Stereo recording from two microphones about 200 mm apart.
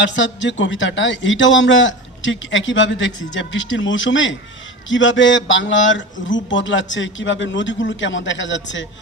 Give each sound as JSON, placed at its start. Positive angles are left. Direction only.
{"t": 0.0, "sound": "a man's voice", "side_deg": 65}